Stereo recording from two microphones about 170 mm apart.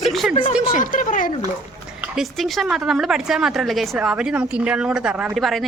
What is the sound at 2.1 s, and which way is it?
A woman's voice, centre (ahead or behind).